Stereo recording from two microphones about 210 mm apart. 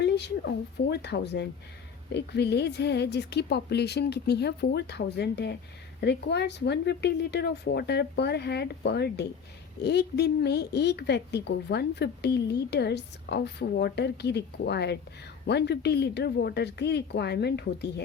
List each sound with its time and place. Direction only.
0.0 s a woman's voice: 55° left (ahead or behind)